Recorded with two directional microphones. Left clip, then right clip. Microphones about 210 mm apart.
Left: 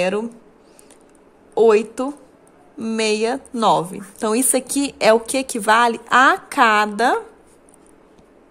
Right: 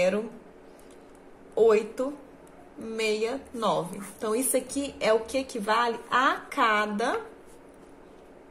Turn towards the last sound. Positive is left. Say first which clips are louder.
# left 10 dB
turn(degrees=50)  # may be behind; listen again after turning